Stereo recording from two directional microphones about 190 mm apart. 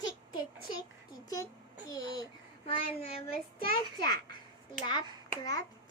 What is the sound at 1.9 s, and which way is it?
A child's voice, 20° left (ahead or behind).